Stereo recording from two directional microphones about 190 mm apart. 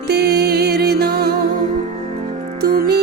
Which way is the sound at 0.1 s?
55° right (ahead or behind).